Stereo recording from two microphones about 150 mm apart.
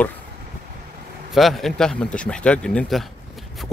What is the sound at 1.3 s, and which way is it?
Speech, centre (ahead or behind).